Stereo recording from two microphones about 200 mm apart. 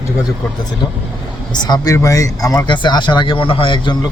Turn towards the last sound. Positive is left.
turn(degrees=25)  # may be behind; listen again after turning